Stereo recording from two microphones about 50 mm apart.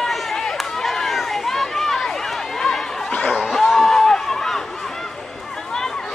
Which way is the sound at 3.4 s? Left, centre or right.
Centre.